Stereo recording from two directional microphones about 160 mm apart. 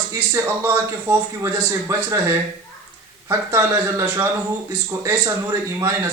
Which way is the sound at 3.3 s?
20° right (ahead or behind).